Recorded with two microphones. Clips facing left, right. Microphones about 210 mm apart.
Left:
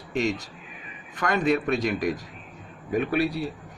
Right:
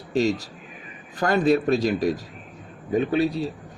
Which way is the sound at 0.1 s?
35° right (ahead or behind).